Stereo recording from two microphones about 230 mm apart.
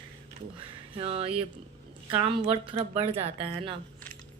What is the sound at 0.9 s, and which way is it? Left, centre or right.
Speech, right.